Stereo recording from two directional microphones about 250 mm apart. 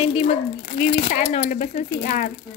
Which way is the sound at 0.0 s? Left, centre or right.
Left.